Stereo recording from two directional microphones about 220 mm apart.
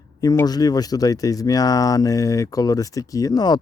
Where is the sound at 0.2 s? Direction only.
15° left (ahead or behind).